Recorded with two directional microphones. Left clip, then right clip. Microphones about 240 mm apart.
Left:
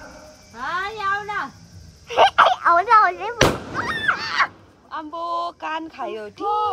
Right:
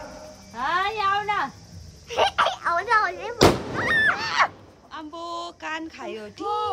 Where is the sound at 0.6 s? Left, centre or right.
Right.